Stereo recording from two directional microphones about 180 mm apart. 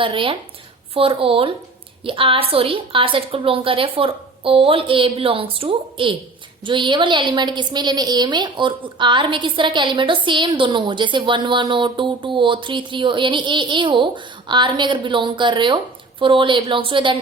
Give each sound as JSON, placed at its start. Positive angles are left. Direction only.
{"t": 0.0, "sound": "a woman's voice", "side_deg": -30}